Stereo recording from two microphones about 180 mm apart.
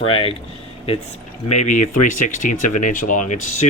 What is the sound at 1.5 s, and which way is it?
A man's voice, 40° left (ahead or behind).